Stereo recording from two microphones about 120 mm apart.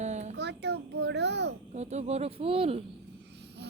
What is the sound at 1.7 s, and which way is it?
Speech, 70° right (ahead or behind).